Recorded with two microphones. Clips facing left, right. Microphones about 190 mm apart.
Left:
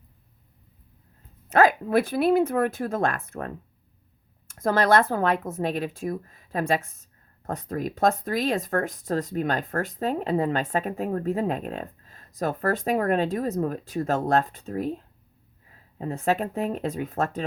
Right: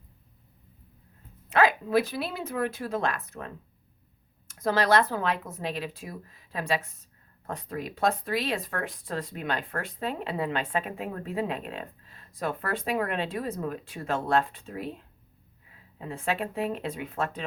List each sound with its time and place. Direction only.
1.5 s speech: 45° left (ahead or behind)